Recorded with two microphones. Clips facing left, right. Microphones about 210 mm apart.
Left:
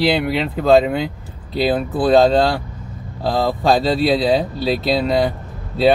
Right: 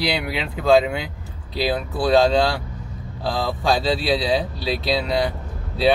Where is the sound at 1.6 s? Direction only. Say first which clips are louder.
Left 5 dB; 50° left (ahead or behind).